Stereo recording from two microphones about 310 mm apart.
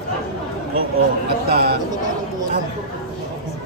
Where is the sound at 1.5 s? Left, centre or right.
Right.